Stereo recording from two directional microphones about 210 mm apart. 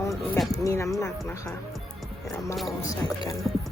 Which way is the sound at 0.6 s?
15° left (ahead or behind).